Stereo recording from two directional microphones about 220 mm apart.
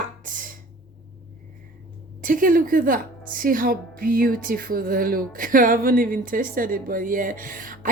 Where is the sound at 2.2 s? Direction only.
40° right (ahead or behind).